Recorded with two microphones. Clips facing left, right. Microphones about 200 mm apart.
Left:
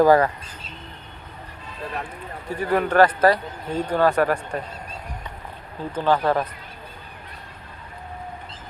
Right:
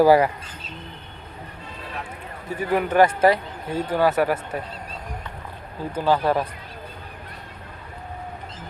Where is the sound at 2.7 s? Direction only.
10° right (ahead or behind).